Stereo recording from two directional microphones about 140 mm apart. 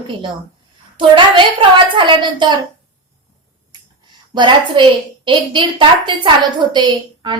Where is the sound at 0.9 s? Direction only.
35° right (ahead or behind).